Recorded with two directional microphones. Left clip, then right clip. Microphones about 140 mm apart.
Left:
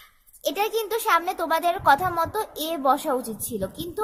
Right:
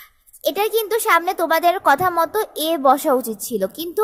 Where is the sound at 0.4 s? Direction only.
25° right (ahead or behind).